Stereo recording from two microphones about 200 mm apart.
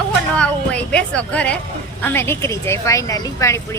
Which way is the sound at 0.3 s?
5° left (ahead or behind).